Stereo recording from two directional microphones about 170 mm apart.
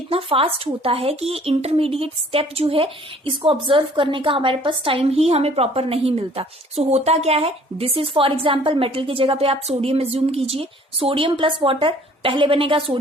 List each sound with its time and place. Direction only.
0.1 s speech: 35° right (ahead or behind)